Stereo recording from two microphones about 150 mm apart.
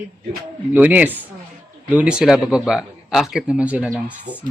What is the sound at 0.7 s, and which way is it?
Speech, 10° right (ahead or behind).